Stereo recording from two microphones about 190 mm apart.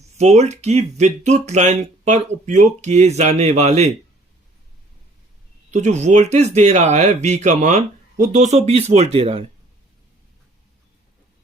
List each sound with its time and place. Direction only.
0.2 s speech: 35° right (ahead or behind)
5.7 s speech: 35° right (ahead or behind)